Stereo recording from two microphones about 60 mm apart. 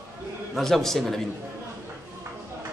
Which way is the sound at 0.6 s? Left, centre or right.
Centre.